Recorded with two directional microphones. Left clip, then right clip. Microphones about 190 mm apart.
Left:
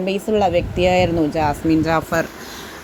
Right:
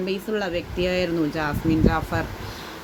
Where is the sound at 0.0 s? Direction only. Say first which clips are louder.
Left 8 dB; 20° left (ahead or behind).